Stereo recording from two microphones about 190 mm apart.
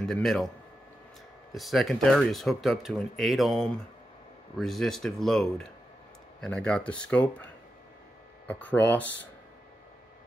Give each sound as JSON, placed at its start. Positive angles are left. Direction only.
{"t": 0.0, "sound": "speech", "side_deg": 0}
{"t": 1.5, "sound": "speech", "side_deg": 0}
{"t": 8.5, "sound": "speech", "side_deg": 10}